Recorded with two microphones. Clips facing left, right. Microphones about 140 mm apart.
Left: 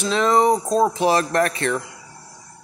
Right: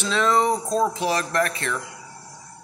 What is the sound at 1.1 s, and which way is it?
Speech, 45° left (ahead or behind).